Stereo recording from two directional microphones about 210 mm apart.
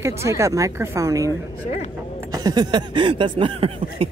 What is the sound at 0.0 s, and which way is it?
Speech, 15° right (ahead or behind).